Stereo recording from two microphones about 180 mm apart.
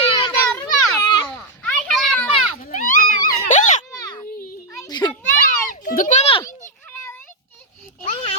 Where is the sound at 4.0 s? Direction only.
20° left (ahead or behind).